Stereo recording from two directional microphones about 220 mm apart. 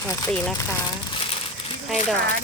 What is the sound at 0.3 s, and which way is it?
Speech, 5° left (ahead or behind).